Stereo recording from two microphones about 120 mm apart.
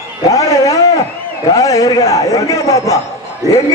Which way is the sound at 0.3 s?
30° left (ahead or behind).